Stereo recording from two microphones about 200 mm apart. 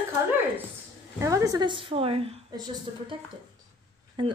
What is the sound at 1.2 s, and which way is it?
A woman's voice, 15° right (ahead or behind).